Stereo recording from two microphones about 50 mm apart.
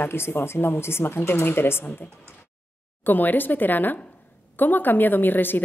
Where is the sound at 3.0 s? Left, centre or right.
Left.